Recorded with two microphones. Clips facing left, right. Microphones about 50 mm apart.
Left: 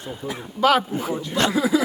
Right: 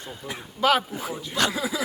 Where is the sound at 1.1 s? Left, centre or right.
Left.